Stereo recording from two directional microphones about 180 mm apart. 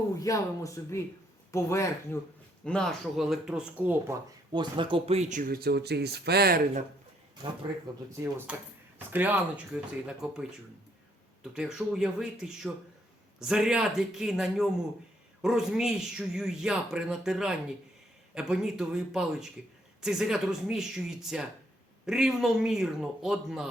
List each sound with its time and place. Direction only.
0.2 s speech: 20° left (ahead or behind)
2.6 s a man's voice: 5° left (ahead or behind)
4.5 s speech: 25° right (ahead or behind); by 6.6 s 60° right (ahead or behind)
8.1 s speech: 15° right (ahead or behind)
11.5 s a man's voice: 5° right (ahead or behind)